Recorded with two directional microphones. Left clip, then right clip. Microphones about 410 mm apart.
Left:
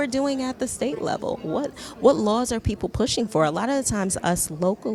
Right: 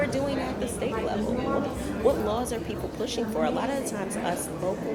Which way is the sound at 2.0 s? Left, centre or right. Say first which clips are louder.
Left 6 dB; left.